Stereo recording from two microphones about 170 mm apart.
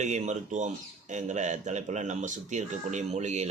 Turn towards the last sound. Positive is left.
turn(degrees=-40)  # may be behind; listen again after turning